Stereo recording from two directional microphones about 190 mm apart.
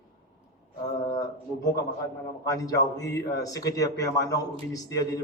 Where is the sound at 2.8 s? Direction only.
65° left (ahead or behind).